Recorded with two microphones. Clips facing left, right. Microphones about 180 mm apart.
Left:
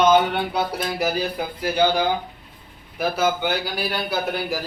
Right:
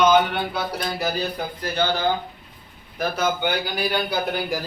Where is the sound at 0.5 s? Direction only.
10° left (ahead or behind).